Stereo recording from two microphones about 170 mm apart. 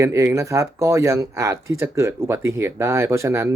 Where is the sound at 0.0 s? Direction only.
15° right (ahead or behind).